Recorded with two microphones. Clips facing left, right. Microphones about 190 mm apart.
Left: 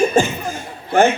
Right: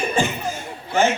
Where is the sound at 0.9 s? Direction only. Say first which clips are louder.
Left 5 dB; 55° left (ahead or behind).